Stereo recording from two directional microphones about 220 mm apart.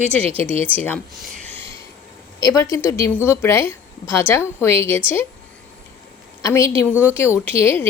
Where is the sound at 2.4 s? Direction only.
15° left (ahead or behind).